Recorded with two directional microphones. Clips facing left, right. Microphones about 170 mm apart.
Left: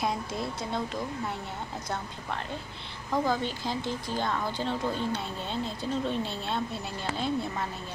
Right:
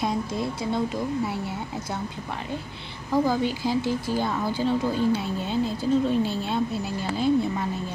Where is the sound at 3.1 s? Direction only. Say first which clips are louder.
Right 5 dB; 5° right (ahead or behind).